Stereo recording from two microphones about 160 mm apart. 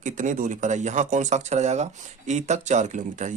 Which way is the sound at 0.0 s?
50° right (ahead or behind).